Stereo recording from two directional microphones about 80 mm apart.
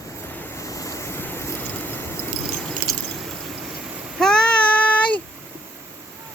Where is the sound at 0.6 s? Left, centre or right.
Left.